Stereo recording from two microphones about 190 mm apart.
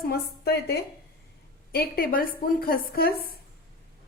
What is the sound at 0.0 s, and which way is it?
A woman's voice, 55° left (ahead or behind).